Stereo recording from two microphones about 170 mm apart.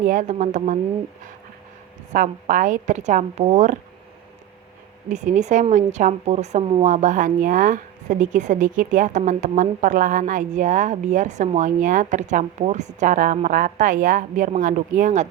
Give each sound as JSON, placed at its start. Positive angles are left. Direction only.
{"t": 0.0, "sound": "speech", "side_deg": -50}
{"t": 2.1, "sound": "speech", "side_deg": -50}
{"t": 5.0, "sound": "speech", "side_deg": -45}